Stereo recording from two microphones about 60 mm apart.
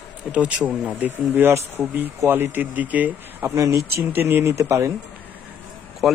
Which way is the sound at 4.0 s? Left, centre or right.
Right.